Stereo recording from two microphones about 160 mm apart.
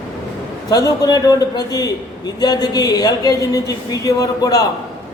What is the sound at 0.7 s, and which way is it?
A man's voice, 25° left (ahead or behind).